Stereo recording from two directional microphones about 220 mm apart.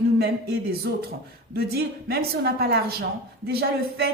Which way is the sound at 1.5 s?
45° right (ahead or behind).